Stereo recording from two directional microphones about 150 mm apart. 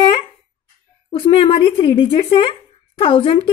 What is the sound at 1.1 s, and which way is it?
Speech, 35° left (ahead or behind).